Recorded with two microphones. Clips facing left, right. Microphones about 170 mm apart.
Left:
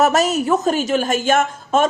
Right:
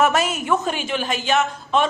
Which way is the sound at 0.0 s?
40° left (ahead or behind).